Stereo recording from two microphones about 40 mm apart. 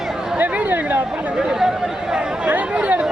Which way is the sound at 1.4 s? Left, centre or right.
Centre.